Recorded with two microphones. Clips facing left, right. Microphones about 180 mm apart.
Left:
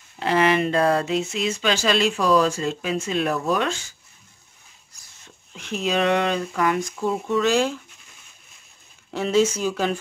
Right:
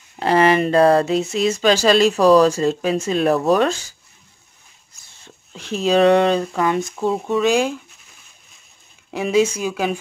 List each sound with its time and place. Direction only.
0.2 s speech: 40° right (ahead or behind)
5.0 s speech: 30° right (ahead or behind)
7.3 s speech: 15° right (ahead or behind)
9.1 s speech: 10° right (ahead or behind)